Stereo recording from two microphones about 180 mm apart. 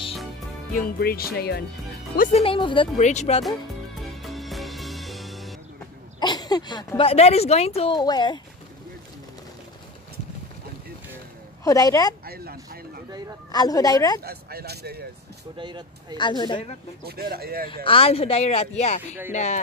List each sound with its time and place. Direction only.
0.7 s speech: 55° left (ahead or behind)
2.4 s a woman's voice: 30° left (ahead or behind)
3.0 s speech: 40° left (ahead or behind)
4.0 s music: centre (ahead or behind)
6.1 s speech: 20° left (ahead or behind)
11.6 s a woman's voice: 20° left (ahead or behind)
12.3 s speech: 60° right (ahead or behind)
13.5 s a woman's voice: 20° left (ahead or behind)
14.2 s speech: 60° right (ahead or behind)
15.5 s speech: 25° right (ahead or behind)
16.2 s a woman's voice: 25° left (ahead or behind)
17.0 s speech: 60° right (ahead or behind)
17.8 s speech: 30° left (ahead or behind)